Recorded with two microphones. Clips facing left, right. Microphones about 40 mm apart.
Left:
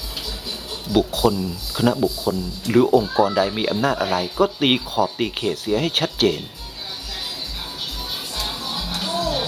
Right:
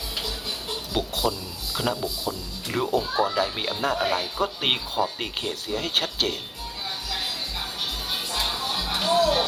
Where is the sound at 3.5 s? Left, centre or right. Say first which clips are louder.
Left 6 dB; centre.